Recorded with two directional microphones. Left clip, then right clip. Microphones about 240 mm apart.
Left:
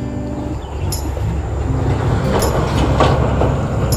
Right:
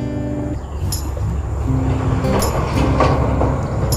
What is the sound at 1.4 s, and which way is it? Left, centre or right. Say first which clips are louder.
Music: even; left.